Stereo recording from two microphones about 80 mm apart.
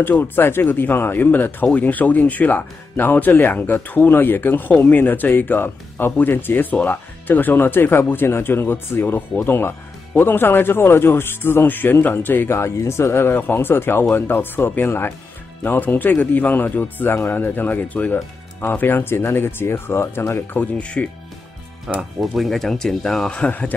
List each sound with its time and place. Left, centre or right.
0.0 s speech: left
20.7 s speech: centre
21.9 s speech: centre